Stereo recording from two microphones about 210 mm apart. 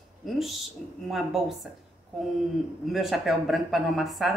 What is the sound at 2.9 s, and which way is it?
Speech, centre (ahead or behind).